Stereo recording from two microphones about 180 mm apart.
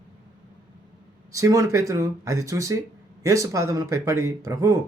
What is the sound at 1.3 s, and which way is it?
Speech, 15° right (ahead or behind).